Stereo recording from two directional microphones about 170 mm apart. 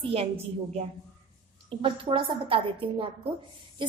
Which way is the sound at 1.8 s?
30° right (ahead or behind).